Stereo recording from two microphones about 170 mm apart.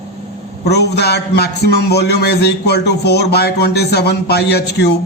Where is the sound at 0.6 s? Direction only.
75° left (ahead or behind).